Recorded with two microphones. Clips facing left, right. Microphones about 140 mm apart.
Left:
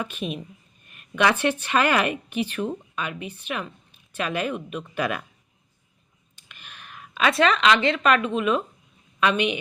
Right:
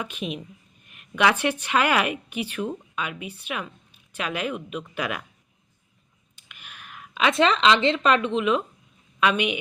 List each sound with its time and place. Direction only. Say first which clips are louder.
0.0 s a woman's voice: left 1 dB; 15° right (ahead or behind)
6.3 s a woman's voice: even; 10° right (ahead or behind)